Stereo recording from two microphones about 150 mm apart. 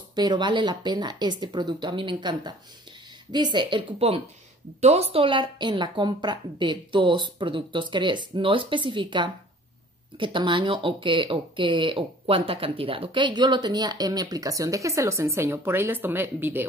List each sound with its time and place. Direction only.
0.1 s speech: 30° right (ahead or behind)
4.8 s a woman's voice: 45° right (ahead or behind); by 16.6 s 15° right (ahead or behind)